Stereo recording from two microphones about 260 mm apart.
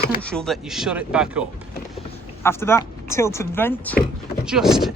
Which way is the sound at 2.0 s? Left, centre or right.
Centre.